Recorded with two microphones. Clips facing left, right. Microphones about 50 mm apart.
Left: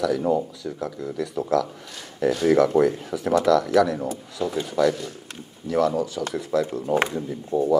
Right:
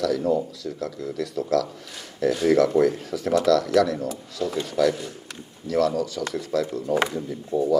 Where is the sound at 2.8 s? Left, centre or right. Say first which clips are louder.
Left 1 dB; left.